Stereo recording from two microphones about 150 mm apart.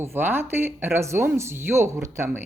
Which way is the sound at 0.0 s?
15° right (ahead or behind).